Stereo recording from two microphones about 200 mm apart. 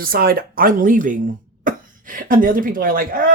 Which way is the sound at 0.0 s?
50° right (ahead or behind).